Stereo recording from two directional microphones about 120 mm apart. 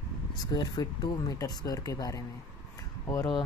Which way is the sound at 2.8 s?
25° left (ahead or behind).